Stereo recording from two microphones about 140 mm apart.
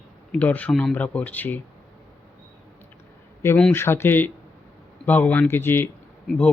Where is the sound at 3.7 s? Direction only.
15° left (ahead or behind).